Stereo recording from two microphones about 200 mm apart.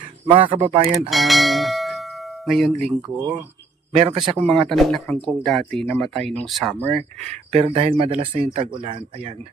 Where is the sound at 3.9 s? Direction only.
30° right (ahead or behind).